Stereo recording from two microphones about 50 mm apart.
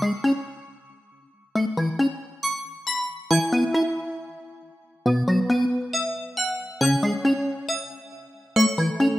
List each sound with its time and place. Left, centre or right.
0.0 s music: centre
1.5 s music: centre
5.0 s music: centre
7.3 s music: centre
8.5 s music: centre